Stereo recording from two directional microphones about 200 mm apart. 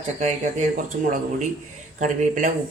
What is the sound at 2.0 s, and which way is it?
Speech, 40° right (ahead or behind).